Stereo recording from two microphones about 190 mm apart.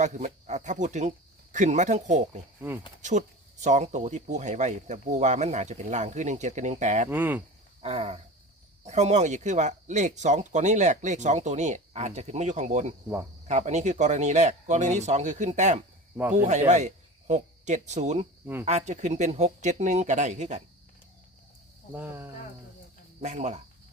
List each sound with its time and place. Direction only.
0.0 s speech: 40° right (ahead or behind)
7.1 s speech: 10° right (ahead or behind)
7.8 s cricket: 35° right (ahead or behind)
8.8 s speech: 35° right (ahead or behind)
21.9 s speech: 10° right (ahead or behind)
23.2 s speech: 40° right (ahead or behind)